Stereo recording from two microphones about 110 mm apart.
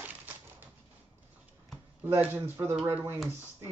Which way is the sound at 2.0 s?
20° right (ahead or behind).